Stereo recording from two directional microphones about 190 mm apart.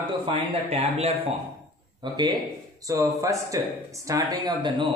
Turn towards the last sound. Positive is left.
turn(degrees=-20)  # may be behind; listen again after turning